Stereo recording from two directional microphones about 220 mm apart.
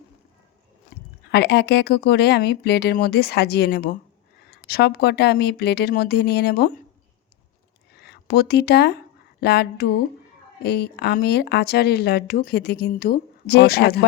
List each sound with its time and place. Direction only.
0.9 s a sound: 45° left (ahead or behind)
1.3 s speech: 50° left (ahead or behind)
7.9 s speech: 45° left (ahead or behind)